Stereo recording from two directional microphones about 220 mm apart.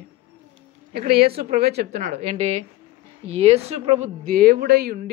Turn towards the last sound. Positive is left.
turn(degrees=-45)  # may be behind; listen again after turning